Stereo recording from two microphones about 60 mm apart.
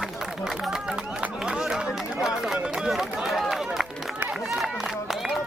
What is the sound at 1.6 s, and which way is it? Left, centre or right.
Chatter, centre.